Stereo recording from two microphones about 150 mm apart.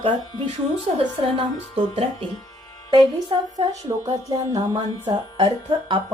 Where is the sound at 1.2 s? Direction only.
35° right (ahead or behind).